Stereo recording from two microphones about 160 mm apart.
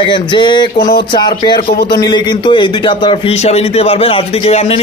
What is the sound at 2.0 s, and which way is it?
A man's voice, 25° left (ahead or behind).